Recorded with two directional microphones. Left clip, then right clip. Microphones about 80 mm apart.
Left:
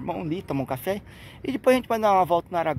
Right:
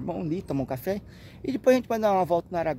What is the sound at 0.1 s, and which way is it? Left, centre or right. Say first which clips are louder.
Speech: left 2 dB; right.